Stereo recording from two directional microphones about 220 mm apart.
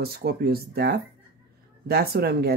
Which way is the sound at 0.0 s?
45° right (ahead or behind).